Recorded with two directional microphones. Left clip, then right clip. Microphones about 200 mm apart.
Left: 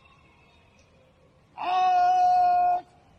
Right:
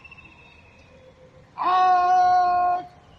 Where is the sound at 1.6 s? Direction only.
45° left (ahead or behind).